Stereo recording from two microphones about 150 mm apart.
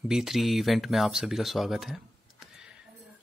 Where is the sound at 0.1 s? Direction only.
5° right (ahead or behind).